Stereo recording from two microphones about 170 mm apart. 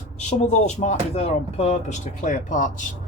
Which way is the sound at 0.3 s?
40° left (ahead or behind).